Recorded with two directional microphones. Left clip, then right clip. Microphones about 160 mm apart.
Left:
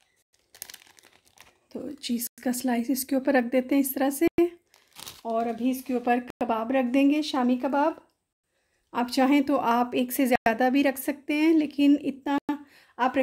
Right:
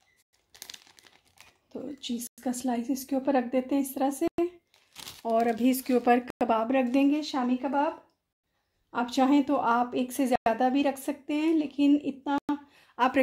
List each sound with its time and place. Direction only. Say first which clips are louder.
0.6 s crumpling: even; 20° left (ahead or behind)
1.7 s speech: left 3 dB; 35° left (ahead or behind)
5.2 s speech: right 2 dB; 10° right (ahead or behind)
6.2 s speech: right 1 dB; centre (ahead or behind)
6.9 s speech: left 2 dB; 20° left (ahead or behind)
7.2 s speech: left 4 dB; 35° left (ahead or behind)
8.9 s speech: left 2 dB; 30° left (ahead or behind)
12.8 s a sound: even; 15° left (ahead or behind)